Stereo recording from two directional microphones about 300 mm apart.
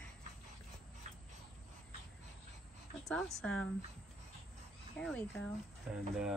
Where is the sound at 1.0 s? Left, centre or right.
Right.